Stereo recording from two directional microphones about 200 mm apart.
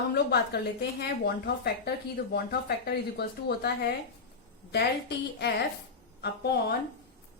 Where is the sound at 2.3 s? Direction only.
50° left (ahead or behind).